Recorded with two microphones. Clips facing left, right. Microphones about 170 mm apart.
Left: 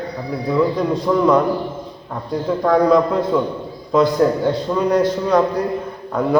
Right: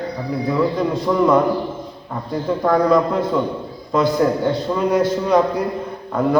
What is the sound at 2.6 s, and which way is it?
Speech, centre (ahead or behind).